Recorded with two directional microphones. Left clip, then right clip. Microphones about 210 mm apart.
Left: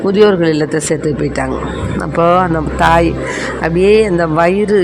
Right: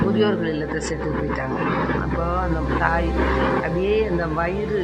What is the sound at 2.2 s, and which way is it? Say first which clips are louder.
Speech: left 13 dB; 45° left (ahead or behind).